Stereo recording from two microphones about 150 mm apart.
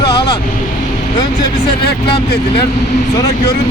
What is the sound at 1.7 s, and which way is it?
Speech, 35° left (ahead or behind).